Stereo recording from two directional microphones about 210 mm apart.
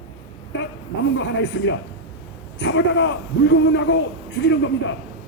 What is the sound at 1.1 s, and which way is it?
A man's voice, 60° left (ahead or behind).